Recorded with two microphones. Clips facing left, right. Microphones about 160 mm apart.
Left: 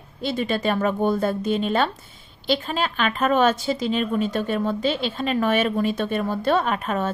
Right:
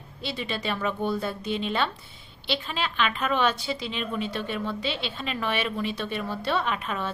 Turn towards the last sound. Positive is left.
turn(degrees=45)  # may be behind; listen again after turning